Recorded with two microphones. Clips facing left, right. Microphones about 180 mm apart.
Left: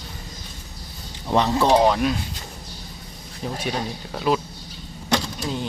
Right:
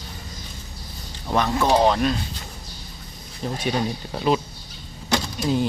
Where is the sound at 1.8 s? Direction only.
5° left (ahead or behind).